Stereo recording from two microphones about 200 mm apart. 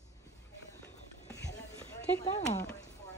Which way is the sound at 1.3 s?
15° left (ahead or behind).